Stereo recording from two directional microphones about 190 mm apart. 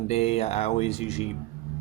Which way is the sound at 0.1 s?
30° left (ahead or behind).